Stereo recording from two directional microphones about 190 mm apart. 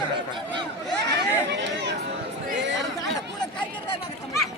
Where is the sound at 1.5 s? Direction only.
65° right (ahead or behind).